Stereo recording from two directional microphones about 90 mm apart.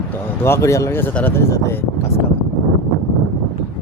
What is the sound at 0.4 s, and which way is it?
Speech, 30° left (ahead or behind).